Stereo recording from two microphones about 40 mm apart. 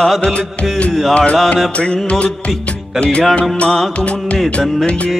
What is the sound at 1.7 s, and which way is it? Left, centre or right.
Music, left.